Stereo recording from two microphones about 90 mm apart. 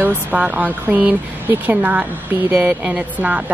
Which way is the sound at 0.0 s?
15° right (ahead or behind).